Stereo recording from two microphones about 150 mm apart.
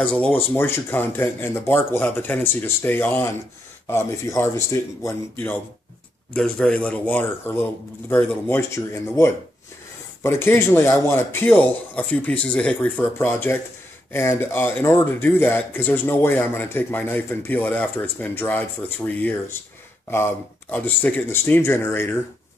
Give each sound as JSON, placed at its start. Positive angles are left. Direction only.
{"t": 0.0, "sound": "speech", "side_deg": 10}